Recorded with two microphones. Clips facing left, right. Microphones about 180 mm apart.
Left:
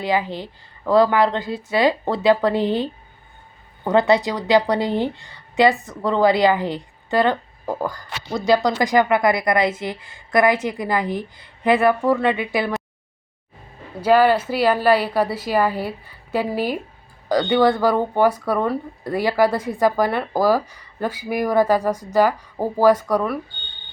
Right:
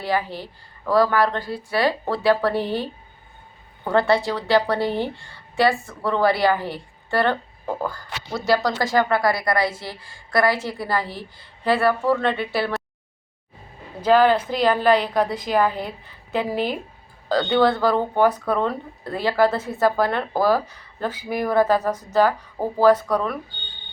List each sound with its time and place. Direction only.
0.0 s speech: 20° left (ahead or behind)
3.8 s a woman's voice: 20° left (ahead or behind)
14.0 s a woman's voice: 10° left (ahead or behind)